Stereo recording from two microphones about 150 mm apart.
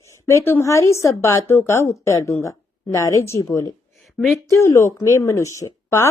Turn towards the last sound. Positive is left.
turn(degrees=20)  # may be behind; listen again after turning